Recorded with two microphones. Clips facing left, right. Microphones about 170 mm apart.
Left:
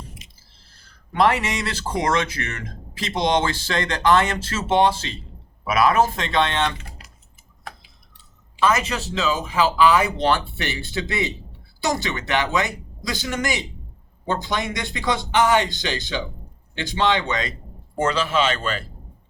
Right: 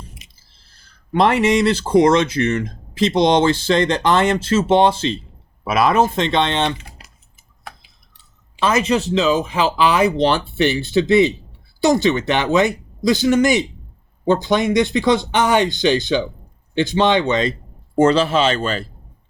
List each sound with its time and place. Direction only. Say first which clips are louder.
1.1 s speech: right 5 dB; 25° right (ahead or behind)
8.5 s speech: right 4 dB; 25° right (ahead or behind)